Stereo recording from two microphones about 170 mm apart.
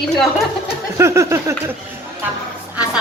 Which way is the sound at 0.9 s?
15° right (ahead or behind).